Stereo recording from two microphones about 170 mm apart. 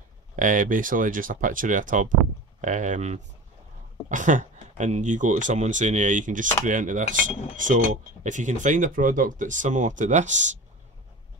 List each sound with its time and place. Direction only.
0.4 s speech: 50° right (ahead or behind)